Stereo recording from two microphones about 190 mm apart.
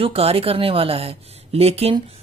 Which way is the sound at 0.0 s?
30° right (ahead or behind).